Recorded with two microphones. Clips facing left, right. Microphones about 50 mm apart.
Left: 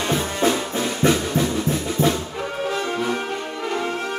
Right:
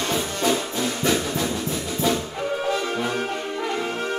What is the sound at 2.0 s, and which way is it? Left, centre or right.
Music, left.